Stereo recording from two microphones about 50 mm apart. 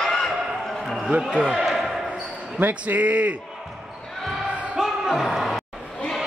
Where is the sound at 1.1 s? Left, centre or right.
Right.